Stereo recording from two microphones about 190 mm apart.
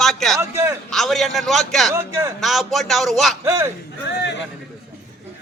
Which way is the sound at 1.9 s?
15° right (ahead or behind).